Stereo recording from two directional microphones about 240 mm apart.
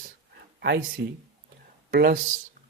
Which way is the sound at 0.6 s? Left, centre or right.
Right.